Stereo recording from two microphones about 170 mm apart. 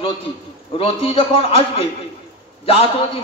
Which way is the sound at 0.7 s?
35° left (ahead or behind).